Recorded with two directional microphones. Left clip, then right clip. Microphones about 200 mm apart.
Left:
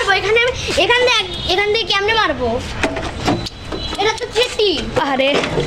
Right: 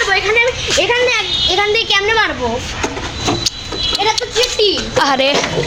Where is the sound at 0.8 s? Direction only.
20° left (ahead or behind).